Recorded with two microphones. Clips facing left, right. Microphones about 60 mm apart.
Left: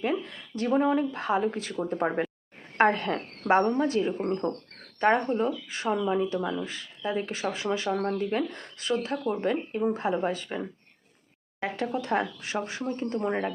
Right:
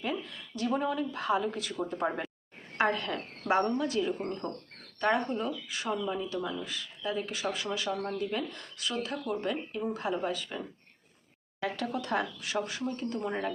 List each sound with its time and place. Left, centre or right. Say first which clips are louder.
0.0 s speech: left 6 dB; left
2.7 s speech: left 6 dB; left
4.2 s speech: left 7 dB; centre
4.9 s speech: left 5 dB; left